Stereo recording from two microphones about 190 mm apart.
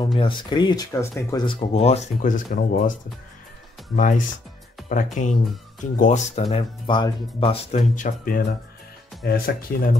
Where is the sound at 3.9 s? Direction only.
45° left (ahead or behind).